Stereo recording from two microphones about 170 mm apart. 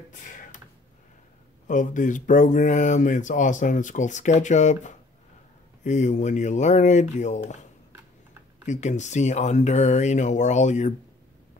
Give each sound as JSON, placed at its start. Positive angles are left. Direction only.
{"t": 0.1, "sound": "a sound", "side_deg": 50}
{"t": 1.7, "sound": "speech", "side_deg": 50}
{"t": 8.6, "sound": "speech", "side_deg": 45}